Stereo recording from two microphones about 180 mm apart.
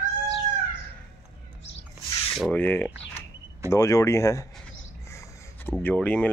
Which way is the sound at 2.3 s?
5° left (ahead or behind).